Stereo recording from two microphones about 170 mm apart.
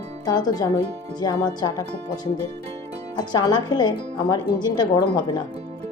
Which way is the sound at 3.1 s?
25° left (ahead or behind).